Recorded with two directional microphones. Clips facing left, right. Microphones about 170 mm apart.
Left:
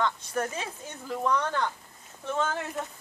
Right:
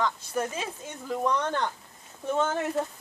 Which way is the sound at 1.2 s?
20° right (ahead or behind).